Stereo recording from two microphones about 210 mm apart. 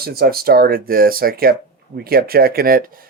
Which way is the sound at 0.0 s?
45° right (ahead or behind).